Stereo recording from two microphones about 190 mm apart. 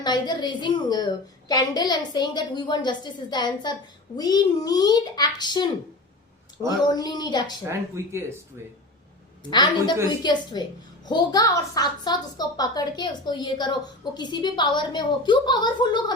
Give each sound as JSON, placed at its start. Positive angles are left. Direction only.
{"t": 0.0, "sound": "a child's voice", "side_deg": 20}
{"t": 6.7, "sound": "a child's voice", "side_deg": 20}
{"t": 7.6, "sound": "speech", "side_deg": -15}
{"t": 9.5, "sound": "a child's voice", "side_deg": 20}